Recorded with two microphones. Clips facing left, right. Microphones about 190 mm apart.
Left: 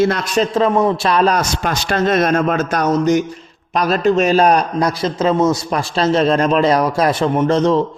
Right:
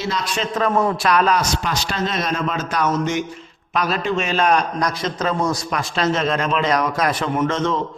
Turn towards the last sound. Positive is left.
turn(degrees=35)  # may be behind; listen again after turning